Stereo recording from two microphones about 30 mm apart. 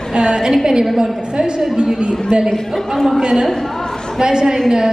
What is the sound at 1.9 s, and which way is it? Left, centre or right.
Speech, right.